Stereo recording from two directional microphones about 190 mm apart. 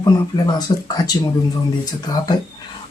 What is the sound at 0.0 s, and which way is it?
Speech, 25° left (ahead or behind).